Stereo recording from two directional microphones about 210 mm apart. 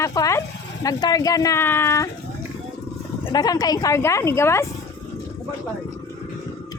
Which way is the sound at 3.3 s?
20° left (ahead or behind).